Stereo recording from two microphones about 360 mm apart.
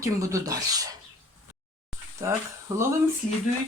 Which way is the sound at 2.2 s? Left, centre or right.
Centre.